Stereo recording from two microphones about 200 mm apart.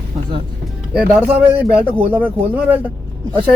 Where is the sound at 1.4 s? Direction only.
10° right (ahead or behind).